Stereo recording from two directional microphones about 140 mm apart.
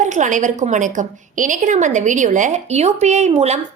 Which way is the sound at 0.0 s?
60° right (ahead or behind).